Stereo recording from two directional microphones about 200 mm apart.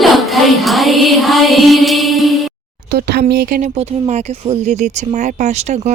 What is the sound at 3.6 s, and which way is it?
Speech, 35° right (ahead or behind).